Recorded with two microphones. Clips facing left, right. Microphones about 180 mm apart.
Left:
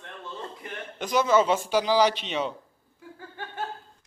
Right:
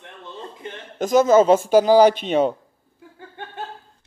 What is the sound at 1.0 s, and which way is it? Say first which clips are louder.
Speech: right 8 dB; 45° right (ahead or behind).